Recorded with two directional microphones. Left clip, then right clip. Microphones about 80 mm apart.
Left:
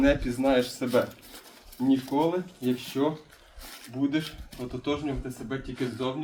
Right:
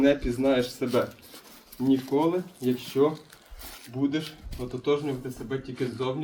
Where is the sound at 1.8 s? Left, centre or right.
Right.